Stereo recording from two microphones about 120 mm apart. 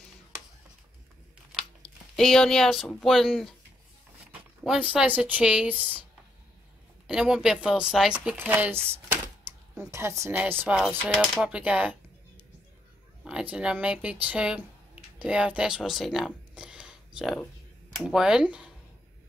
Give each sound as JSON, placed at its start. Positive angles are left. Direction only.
{"t": 1.8, "sound": "a sound", "side_deg": 5}
{"t": 3.0, "sound": "speech", "side_deg": 0}
{"t": 4.3, "sound": "speech", "side_deg": -10}
{"t": 7.1, "sound": "speech", "side_deg": -5}
{"t": 9.5, "sound": "a sound", "side_deg": -15}
{"t": 9.8, "sound": "a woman's voice", "side_deg": -25}
{"t": 10.8, "sound": "speech", "side_deg": 5}
{"t": 11.4, "sound": "speech", "side_deg": -10}
{"t": 13.2, "sound": "speech", "side_deg": -10}